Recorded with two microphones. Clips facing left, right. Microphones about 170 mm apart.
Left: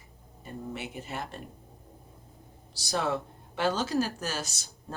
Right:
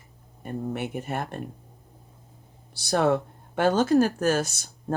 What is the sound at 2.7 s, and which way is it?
Speech, 60° right (ahead or behind).